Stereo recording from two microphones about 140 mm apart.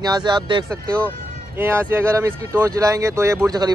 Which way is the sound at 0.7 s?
10° left (ahead or behind).